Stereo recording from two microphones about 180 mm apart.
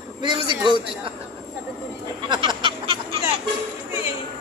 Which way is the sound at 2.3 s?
25° right (ahead or behind).